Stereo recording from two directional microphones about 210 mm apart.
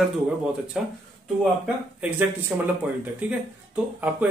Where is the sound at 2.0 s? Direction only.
10° right (ahead or behind).